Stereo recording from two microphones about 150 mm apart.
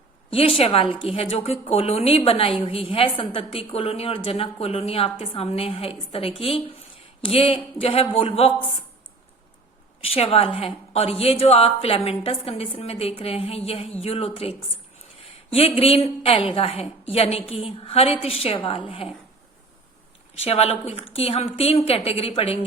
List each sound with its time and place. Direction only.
0.3 s a woman's voice: 40° left (ahead or behind)
10.0 s a woman's voice: 40° left (ahead or behind)
20.4 s a woman's voice: 40° left (ahead or behind)